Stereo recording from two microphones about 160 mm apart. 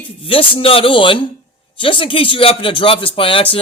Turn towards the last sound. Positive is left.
turn(degrees=35)  # may be behind; listen again after turning